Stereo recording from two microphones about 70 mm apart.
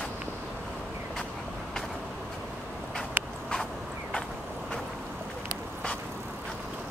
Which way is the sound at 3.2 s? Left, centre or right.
Right.